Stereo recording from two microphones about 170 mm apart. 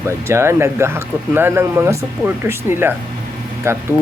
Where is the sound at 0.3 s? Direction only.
15° right (ahead or behind).